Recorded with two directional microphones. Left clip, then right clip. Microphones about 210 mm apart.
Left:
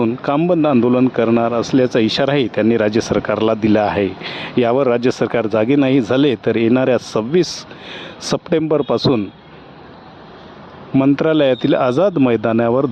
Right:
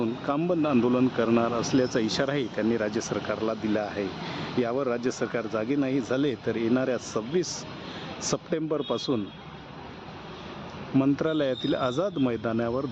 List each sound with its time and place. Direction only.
0.0 s speech: 30° left (ahead or behind)
10.9 s speech: 35° left (ahead or behind)